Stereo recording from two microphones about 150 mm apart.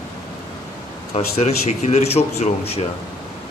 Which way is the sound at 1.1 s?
45° left (ahead or behind).